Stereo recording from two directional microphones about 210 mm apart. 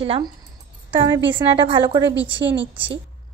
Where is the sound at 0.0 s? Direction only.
25° right (ahead or behind).